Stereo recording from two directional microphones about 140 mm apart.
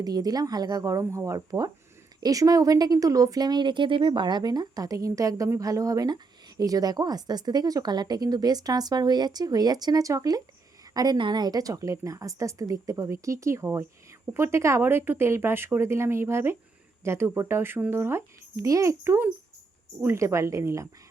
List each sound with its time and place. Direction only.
0.0 s a woman's voice: 25° right (ahead or behind)